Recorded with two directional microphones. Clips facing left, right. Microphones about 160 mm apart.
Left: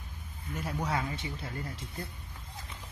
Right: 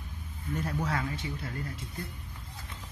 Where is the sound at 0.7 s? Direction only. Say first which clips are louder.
Left 1 dB; 15° left (ahead or behind).